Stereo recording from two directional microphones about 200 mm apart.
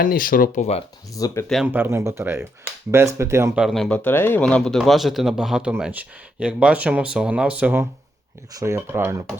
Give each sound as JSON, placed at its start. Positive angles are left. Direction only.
{"t": 0.0, "sound": "speech", "side_deg": 45}
{"t": 1.1, "sound": "speech", "side_deg": 15}
{"t": 1.6, "sound": "speech", "side_deg": -10}